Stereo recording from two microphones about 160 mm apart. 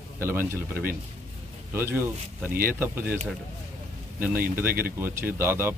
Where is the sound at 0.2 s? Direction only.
15° right (ahead or behind).